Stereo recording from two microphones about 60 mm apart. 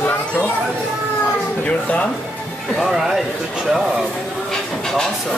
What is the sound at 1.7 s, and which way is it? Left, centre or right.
Speech, left.